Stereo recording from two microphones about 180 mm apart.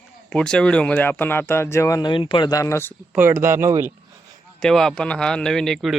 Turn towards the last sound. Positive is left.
turn(degrees=0)  # may be behind; listen again after turning